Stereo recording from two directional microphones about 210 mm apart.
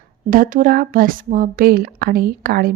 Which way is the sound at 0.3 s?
40° right (ahead or behind).